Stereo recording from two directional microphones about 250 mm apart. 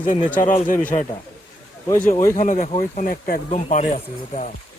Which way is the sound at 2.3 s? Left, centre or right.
Left.